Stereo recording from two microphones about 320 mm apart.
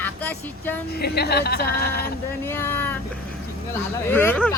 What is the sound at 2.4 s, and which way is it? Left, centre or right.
Speech, centre.